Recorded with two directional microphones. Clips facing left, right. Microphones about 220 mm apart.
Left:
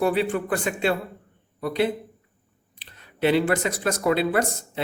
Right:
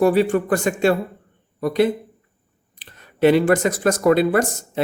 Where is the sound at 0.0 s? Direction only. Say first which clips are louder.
Right 6 dB; 45° right (ahead or behind).